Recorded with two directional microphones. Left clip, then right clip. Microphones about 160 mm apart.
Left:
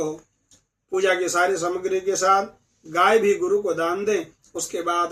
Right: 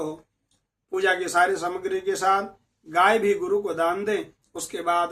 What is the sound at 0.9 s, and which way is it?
A man's voice, 20° right (ahead or behind).